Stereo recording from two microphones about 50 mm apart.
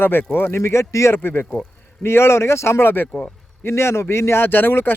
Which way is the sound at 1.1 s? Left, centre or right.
Left.